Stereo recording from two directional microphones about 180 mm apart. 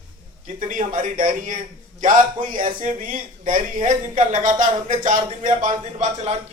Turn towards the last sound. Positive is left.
turn(degrees=-40)  # may be behind; listen again after turning